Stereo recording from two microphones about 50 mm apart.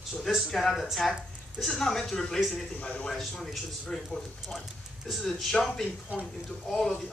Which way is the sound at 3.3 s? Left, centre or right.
Centre.